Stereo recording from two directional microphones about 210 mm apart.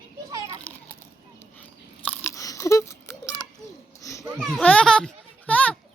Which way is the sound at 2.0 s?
10° left (ahead or behind).